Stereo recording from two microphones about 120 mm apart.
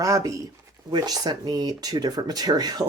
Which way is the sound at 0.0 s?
25° right (ahead or behind).